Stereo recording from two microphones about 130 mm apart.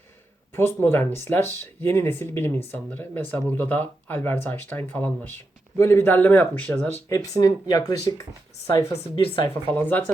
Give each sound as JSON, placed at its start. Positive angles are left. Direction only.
{"t": 0.5, "sound": "speech", "side_deg": 20}
{"t": 7.1, "sound": "speech", "side_deg": 25}
{"t": 9.2, "sound": "speech", "side_deg": 40}
{"t": 9.7, "sound": "speech", "side_deg": 15}